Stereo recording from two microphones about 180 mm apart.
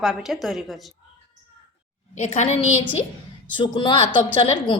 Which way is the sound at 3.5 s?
25° left (ahead or behind).